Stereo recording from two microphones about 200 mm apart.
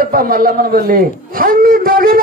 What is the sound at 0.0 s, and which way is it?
A man's voice, 45° right (ahead or behind).